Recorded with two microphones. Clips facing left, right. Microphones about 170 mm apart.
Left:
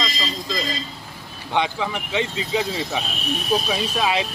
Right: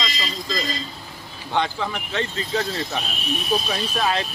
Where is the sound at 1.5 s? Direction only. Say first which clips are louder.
Left 1 dB; 10° left (ahead or behind).